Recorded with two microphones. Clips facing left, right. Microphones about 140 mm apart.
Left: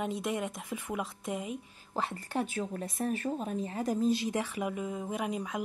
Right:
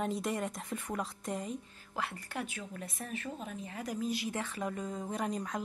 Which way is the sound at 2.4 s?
40° left (ahead or behind).